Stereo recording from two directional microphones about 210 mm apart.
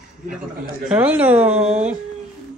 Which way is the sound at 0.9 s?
5° right (ahead or behind).